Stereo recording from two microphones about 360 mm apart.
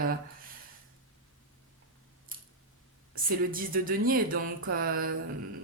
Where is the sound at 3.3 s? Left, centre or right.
Right.